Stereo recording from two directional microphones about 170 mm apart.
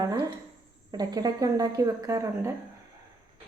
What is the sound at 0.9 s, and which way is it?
A woman's voice, 25° right (ahead or behind).